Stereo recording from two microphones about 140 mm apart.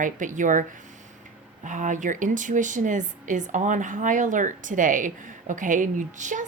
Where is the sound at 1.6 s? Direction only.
65° right (ahead or behind).